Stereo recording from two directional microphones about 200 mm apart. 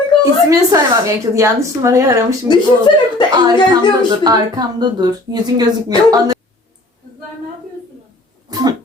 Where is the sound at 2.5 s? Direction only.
25° left (ahead or behind).